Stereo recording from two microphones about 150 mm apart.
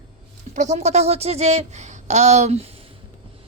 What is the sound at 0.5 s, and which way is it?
Speech, 50° right (ahead or behind).